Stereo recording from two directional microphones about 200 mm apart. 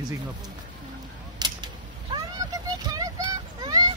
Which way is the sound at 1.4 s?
20° right (ahead or behind).